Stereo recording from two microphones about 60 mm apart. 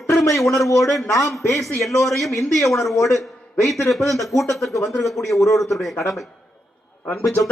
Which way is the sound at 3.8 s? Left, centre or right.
Centre.